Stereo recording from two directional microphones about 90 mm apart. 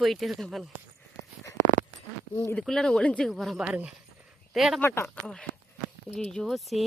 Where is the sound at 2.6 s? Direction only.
5° left (ahead or behind).